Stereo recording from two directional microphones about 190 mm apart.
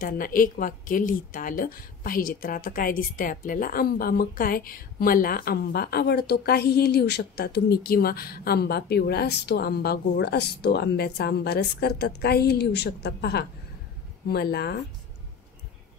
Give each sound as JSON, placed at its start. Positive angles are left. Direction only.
{"t": 0.0, "sound": "a woman's voice", "side_deg": 45}